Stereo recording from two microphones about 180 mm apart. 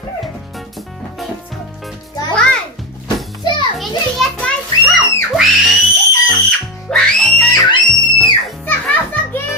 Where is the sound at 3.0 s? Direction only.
25° left (ahead or behind).